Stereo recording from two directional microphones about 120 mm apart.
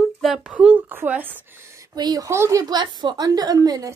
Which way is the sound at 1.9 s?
35° right (ahead or behind).